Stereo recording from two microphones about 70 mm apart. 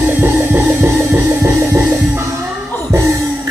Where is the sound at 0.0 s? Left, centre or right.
Right.